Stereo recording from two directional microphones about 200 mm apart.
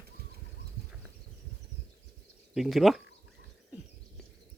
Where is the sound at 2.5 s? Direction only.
Centre (ahead or behind).